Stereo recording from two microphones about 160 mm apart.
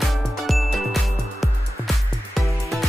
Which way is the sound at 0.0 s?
Centre (ahead or behind).